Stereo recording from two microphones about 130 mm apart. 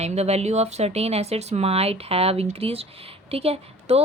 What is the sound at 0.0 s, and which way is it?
A woman's voice, 55° right (ahead or behind).